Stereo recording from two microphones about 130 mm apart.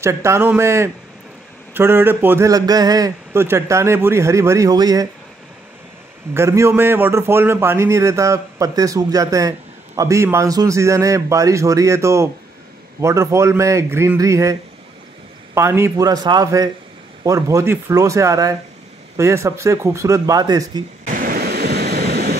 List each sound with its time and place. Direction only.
0.0 s a man's voice: 20° right (ahead or behind)
6.3 s a man's voice: 20° right (ahead or behind)